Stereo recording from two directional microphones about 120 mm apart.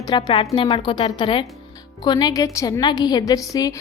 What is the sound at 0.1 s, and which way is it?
A woman's voice, 35° left (ahead or behind).